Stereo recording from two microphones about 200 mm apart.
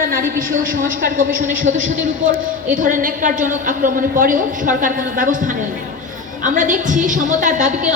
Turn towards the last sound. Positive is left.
turn(degrees=-40)  # may be behind; listen again after turning